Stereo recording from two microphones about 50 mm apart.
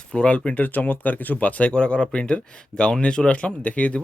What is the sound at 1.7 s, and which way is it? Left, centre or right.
Speech, centre.